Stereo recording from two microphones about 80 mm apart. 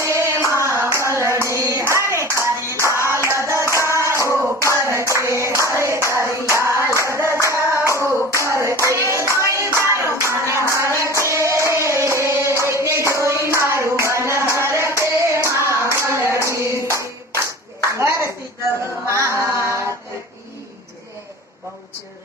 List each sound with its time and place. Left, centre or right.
0.0 s female singing: right
0.9 s a sound: right
1.8 s music: right
3.8 s clapping: right
9.4 s music: right
9.6 s music: left
10.0 s music: right
18.0 s a sound: right
19.0 s music: right